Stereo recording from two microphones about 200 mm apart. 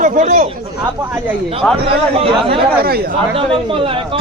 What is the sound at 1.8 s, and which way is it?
Speech, 30° right (ahead or behind).